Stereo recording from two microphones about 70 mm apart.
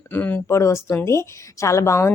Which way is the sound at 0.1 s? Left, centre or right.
Left.